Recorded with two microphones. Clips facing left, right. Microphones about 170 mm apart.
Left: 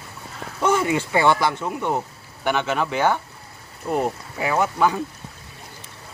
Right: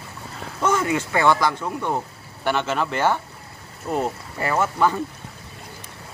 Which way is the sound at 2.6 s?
5° left (ahead or behind).